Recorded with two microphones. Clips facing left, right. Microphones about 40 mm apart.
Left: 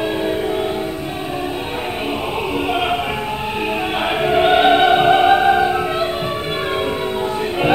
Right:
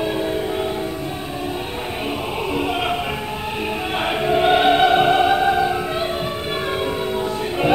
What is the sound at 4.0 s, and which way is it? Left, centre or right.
Opera, centre.